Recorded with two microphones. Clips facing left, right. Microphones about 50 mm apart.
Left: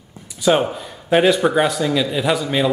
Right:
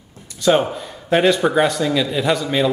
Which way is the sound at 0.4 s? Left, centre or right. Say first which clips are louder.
Even; centre.